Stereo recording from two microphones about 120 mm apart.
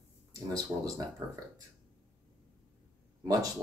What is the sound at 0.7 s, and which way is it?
Speech, 25° right (ahead or behind).